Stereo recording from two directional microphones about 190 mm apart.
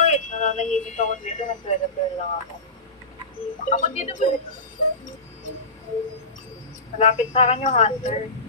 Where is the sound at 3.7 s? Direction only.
40° left (ahead or behind).